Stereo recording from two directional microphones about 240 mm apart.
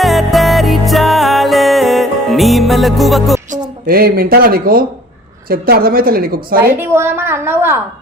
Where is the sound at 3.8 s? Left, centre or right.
Right.